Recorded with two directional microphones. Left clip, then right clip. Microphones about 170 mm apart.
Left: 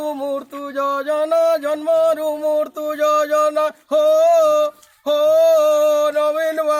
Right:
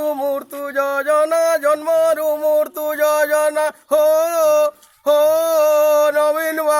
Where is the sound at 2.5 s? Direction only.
20° right (ahead or behind).